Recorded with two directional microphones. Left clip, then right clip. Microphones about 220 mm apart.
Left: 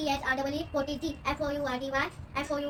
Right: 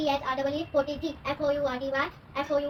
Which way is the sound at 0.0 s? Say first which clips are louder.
Right 2 dB; 25° left (ahead or behind).